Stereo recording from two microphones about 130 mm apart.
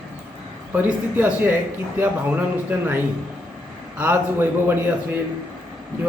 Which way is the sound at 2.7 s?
15° right (ahead or behind).